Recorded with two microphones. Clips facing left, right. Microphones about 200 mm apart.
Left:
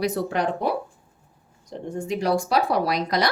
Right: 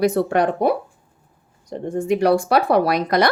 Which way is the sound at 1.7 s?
60° right (ahead or behind).